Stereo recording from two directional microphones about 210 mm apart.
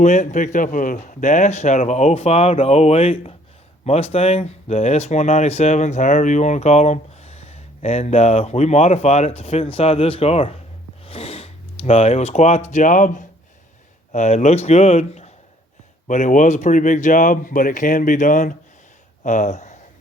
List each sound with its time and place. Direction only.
0.0 s speech: 35° left (ahead or behind)